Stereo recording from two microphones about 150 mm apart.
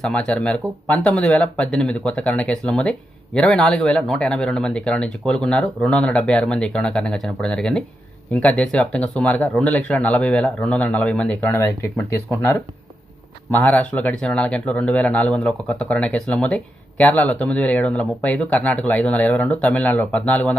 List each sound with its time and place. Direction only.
0.0 s speech: 5° left (ahead or behind)
13.7 s speech: 10° left (ahead or behind)